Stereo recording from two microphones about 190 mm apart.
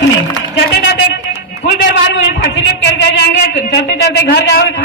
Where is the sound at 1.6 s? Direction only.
60° left (ahead or behind).